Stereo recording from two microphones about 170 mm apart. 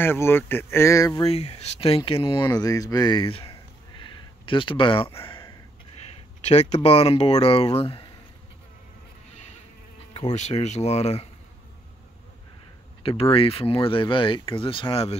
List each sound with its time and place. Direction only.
0.0 s speech: 15° left (ahead or behind)
1.2 s speech: 35° left (ahead or behind)
4.0 s a sound: 30° left (ahead or behind)
6.4 s speech: 40° left (ahead or behind)
10.1 s speech: 45° left (ahead or behind)
13.0 s speech: 30° left (ahead or behind)